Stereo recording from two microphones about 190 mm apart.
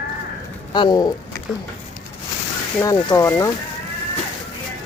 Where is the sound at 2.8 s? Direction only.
20° left (ahead or behind).